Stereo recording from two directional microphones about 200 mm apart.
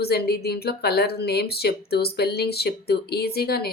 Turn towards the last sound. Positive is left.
turn(degrees=50)  # may be behind; listen again after turning